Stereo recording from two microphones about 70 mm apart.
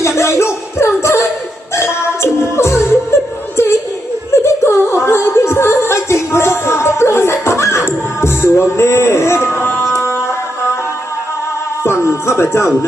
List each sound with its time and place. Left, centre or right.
0.2 s music: left
4.3 s music: left
11.8 s music: left